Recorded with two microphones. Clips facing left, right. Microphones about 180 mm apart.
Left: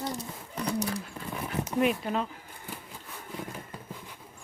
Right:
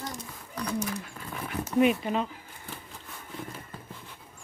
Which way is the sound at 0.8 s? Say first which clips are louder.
Left 1 dB; 30° left (ahead or behind).